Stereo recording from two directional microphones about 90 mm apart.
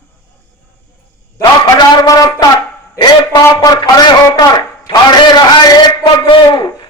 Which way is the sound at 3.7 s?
55° left (ahead or behind).